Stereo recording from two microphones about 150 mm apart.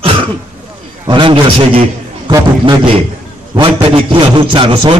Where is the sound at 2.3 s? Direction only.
25° right (ahead or behind).